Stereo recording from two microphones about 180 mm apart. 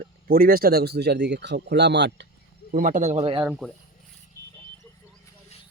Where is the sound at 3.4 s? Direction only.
5° right (ahead or behind).